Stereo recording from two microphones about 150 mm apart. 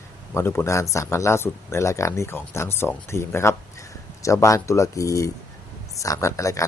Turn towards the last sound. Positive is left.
turn(degrees=20)  # may be behind; listen again after turning